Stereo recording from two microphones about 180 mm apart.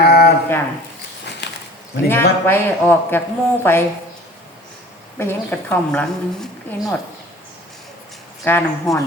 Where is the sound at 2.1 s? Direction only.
10° left (ahead or behind).